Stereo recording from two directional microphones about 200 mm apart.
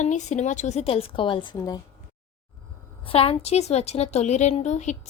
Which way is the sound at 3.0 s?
30° left (ahead or behind).